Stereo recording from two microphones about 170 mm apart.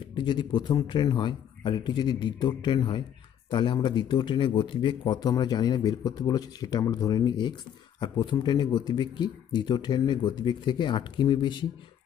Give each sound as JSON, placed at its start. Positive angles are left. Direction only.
{"t": 0.1, "sound": "speech", "side_deg": 25}